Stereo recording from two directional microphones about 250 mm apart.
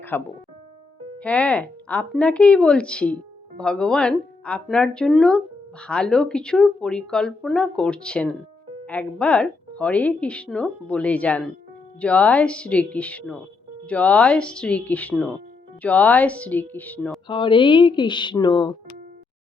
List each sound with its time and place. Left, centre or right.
0.1 s a woman's voice: centre
17.2 s speech: centre